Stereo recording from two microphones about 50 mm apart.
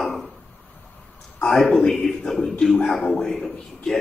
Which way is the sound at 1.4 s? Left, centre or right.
Centre.